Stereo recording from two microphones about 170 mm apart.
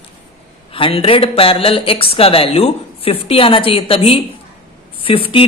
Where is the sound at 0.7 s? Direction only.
30° left (ahead or behind).